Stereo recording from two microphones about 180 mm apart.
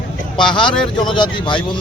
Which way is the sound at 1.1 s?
25° left (ahead or behind).